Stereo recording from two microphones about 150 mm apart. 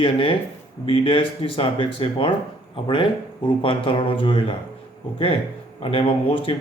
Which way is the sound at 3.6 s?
35° left (ahead or behind).